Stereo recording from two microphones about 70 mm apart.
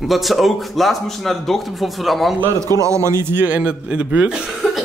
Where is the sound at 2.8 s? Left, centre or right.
Right; by 4.4 s centre.